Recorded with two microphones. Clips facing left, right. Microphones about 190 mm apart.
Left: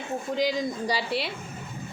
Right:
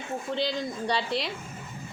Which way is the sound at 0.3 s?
10° left (ahead or behind).